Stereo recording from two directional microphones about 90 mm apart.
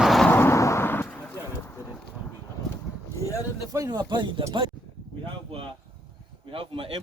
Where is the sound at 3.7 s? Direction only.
45° right (ahead or behind).